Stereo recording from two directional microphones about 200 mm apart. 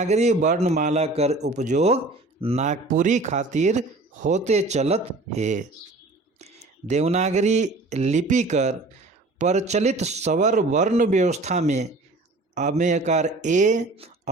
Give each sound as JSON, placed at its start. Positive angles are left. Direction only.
{"t": 0.0, "sound": "a man's voice", "side_deg": -35}